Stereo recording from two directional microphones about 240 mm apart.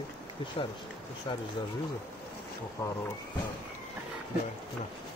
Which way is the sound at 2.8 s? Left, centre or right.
Centre.